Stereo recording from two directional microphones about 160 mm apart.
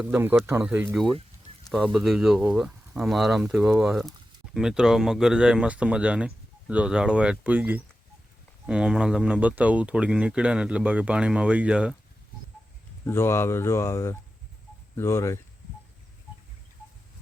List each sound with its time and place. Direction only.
0.0 s speech: 10° right (ahead or behind)
0.9 s speech: centre (ahead or behind)
13.1 s speech: 15° left (ahead or behind)